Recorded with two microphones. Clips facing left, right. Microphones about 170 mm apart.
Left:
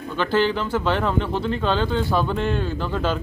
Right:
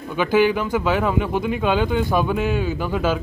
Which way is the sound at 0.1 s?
10° right (ahead or behind).